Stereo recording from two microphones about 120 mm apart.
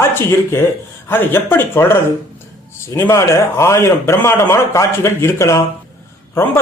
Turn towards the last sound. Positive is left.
turn(degrees=20)  # may be behind; listen again after turning